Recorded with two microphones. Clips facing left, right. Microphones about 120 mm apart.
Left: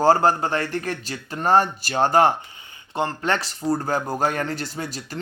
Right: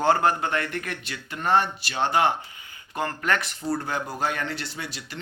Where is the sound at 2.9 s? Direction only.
25° left (ahead or behind).